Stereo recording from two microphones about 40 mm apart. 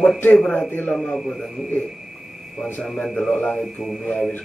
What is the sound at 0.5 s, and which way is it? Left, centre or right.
Speech, left.